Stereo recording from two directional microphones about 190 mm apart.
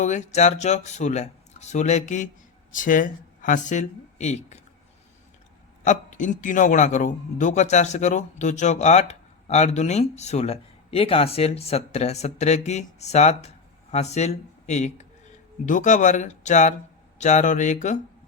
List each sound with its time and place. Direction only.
0.0 s a man's voice: 40° left (ahead or behind)
5.8 s a man's voice: 40° left (ahead or behind)